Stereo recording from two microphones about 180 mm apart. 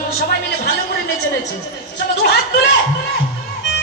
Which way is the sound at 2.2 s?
65° left (ahead or behind).